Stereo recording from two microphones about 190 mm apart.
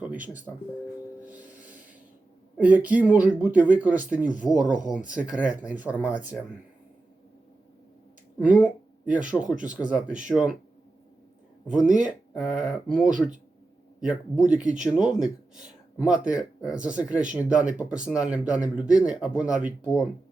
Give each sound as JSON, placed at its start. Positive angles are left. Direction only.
{"t": 0.0, "sound": "speech", "side_deg": -10}
{"t": 2.6, "sound": "speech", "side_deg": -10}
{"t": 4.4, "sound": "speech", "side_deg": 20}
{"t": 4.9, "sound": "speech", "side_deg": -5}
{"t": 8.4, "sound": "speech", "side_deg": -5}
{"t": 12.4, "sound": "speech", "side_deg": -5}